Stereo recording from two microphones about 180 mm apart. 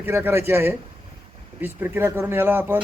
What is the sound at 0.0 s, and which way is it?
Speech, 10° right (ahead or behind).